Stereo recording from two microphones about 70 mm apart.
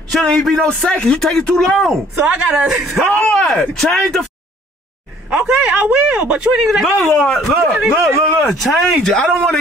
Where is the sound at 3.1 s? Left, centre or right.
Centre.